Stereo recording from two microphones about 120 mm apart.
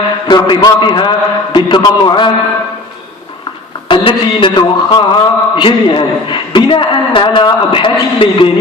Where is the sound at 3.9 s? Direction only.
45° left (ahead or behind).